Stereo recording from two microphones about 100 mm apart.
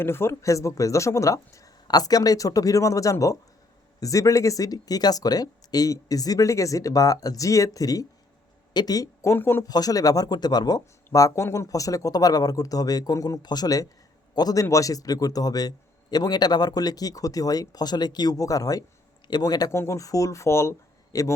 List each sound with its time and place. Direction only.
0.0 s a man's voice: 25° left (ahead or behind)
9.6 s a man's voice: 40° left (ahead or behind)
19.7 s speech: 30° left (ahead or behind)